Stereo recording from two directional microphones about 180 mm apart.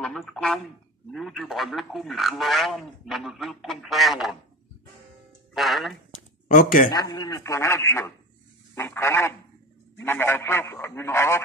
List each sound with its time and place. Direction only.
0.0 s speech: centre (ahead or behind)
5.5 s speech: centre (ahead or behind)
6.1 s a sound: 45° left (ahead or behind)
6.9 s speech: 20° left (ahead or behind)